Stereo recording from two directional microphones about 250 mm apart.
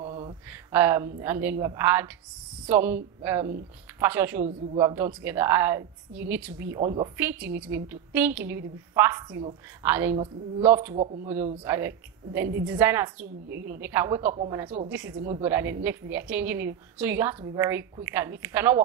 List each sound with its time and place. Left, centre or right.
0.0 s a sound: right
0.5 s a woman's voice: centre
4.0 s a woman's voice: centre
13.2 s a woman's voice: right
13.7 s a woman's voice: centre